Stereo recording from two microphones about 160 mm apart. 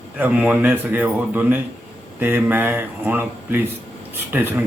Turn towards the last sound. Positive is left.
turn(degrees=-10)  # may be behind; listen again after turning